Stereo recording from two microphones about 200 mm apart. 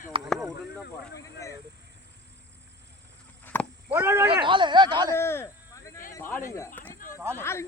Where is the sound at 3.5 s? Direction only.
10° left (ahead or behind).